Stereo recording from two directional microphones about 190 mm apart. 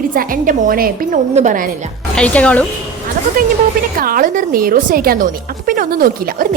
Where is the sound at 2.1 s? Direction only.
5° left (ahead or behind).